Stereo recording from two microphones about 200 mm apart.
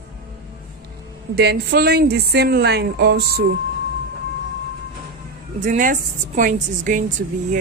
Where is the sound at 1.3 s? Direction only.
55° right (ahead or behind).